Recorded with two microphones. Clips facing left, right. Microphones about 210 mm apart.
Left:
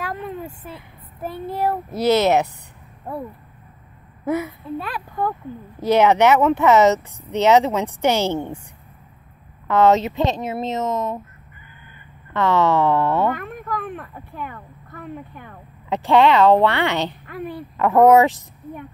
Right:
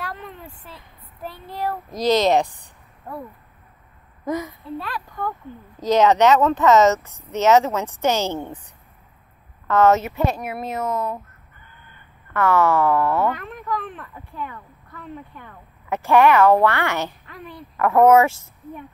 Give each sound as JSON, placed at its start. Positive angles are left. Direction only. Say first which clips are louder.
{"t": 0.4, "sound": "a sound", "louder": "left 8 dB", "side_deg": 45}
{"t": 2.0, "sound": "speech", "louder": "left 1 dB", "side_deg": 10}
{"t": 4.3, "sound": "speech", "louder": "left 3 dB", "side_deg": 10}
{"t": 9.7, "sound": "speech", "louder": "left 1 dB", "side_deg": 15}
{"t": 12.3, "sound": "speech", "louder": "even", "side_deg": 20}
{"t": 13.3, "sound": "speech", "louder": "left 1 dB", "side_deg": 50}
{"t": 15.9, "sound": "speech", "louder": "even", "side_deg": 15}
{"t": 17.3, "sound": "speech", "louder": "left 8 dB", "side_deg": 55}
{"t": 17.7, "sound": "speech", "louder": "left 1 dB", "side_deg": 15}